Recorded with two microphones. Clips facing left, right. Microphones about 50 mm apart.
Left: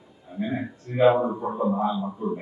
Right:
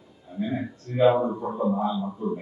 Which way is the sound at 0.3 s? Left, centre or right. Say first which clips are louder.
Even; left.